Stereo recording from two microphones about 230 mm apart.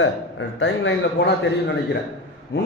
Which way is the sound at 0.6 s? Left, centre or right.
Left.